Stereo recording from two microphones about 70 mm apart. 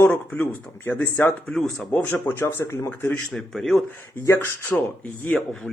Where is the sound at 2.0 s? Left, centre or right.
Left.